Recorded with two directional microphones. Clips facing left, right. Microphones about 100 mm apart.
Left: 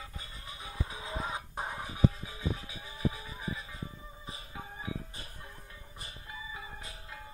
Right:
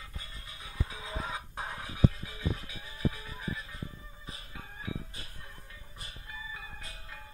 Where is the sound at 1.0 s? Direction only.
15° left (ahead or behind).